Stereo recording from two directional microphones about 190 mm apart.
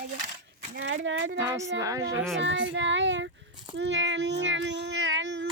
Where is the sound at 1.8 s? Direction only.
15° right (ahead or behind).